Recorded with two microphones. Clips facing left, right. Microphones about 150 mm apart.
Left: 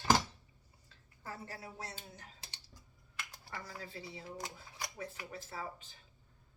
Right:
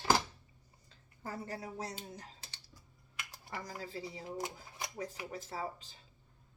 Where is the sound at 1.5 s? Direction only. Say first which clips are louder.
Right 5 dB; 35° right (ahead or behind).